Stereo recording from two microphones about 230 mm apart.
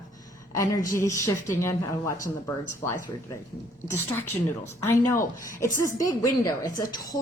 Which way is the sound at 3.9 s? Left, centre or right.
Centre.